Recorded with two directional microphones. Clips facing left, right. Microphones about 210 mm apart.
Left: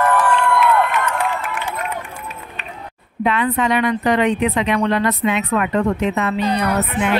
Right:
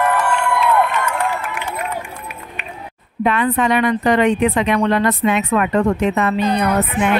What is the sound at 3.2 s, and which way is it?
Speech, 50° right (ahead or behind).